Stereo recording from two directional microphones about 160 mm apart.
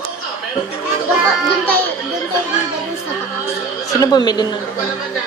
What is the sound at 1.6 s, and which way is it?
Speech, 10° left (ahead or behind).